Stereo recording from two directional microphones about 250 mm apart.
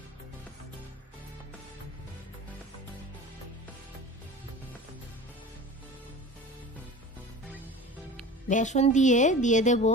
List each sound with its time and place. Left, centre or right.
8.5 s speech: left